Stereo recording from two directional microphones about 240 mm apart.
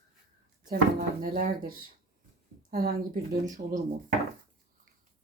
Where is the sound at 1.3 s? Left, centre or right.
Right.